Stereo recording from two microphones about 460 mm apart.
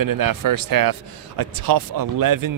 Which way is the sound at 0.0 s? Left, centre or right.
Right.